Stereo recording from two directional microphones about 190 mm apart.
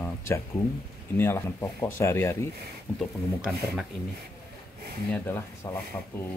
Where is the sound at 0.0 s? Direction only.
15° left (ahead or behind).